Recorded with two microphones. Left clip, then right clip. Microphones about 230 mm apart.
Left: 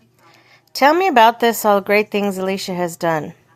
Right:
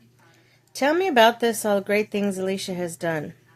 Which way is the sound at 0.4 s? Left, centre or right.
Centre.